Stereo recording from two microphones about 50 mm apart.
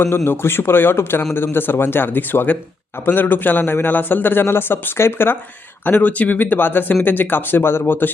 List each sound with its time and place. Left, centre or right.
0.3 s a man's voice: left
5.8 s a man's voice: left